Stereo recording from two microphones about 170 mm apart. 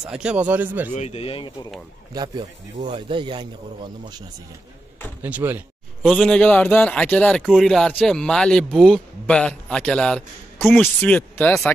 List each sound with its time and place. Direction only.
0.0 s a man's voice: 5° right (ahead or behind)
0.9 s speech: 40° left (ahead or behind)
2.1 s a man's voice: 25° right (ahead or behind)
5.2 s a man's voice: 10° right (ahead or behind)
6.0 s a man's voice: 5° left (ahead or behind)